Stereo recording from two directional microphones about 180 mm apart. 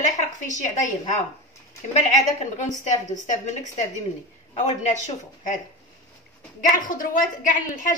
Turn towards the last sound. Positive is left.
turn(degrees=45)  # may be behind; listen again after turning